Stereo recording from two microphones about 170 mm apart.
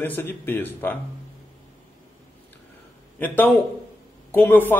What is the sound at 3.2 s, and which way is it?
A man's voice, 10° left (ahead or behind).